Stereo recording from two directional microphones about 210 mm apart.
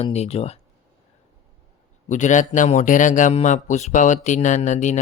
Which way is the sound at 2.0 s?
35° left (ahead or behind).